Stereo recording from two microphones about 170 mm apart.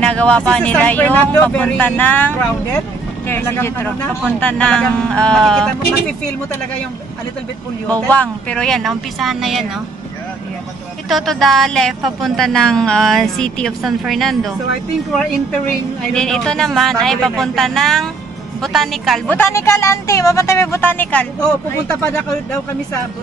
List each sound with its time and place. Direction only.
0.0 s speech: 5° left (ahead or behind)
7.9 s speech: 10° left (ahead or behind)
11.1 s speech: centre (ahead or behind)
19.3 s speech: 15° left (ahead or behind)